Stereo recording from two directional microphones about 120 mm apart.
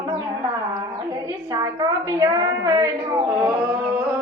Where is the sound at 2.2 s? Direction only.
30° right (ahead or behind).